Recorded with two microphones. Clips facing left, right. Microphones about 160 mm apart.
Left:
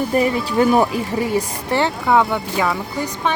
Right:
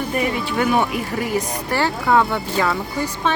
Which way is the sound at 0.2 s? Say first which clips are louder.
Left 4 dB; 35° left (ahead or behind).